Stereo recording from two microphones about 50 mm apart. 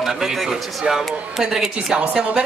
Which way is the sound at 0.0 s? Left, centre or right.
Centre.